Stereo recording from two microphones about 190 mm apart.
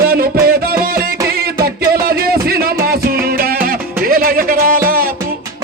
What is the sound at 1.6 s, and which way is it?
Music, 55° right (ahead or behind).